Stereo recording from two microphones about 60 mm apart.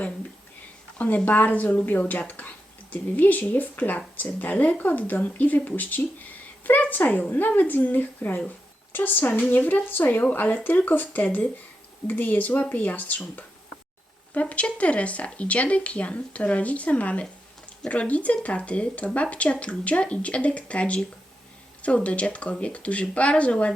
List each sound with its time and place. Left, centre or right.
0.9 s speech: left
14.5 s speech: left